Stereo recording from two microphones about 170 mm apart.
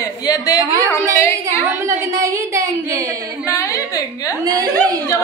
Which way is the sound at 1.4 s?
15° right (ahead or behind).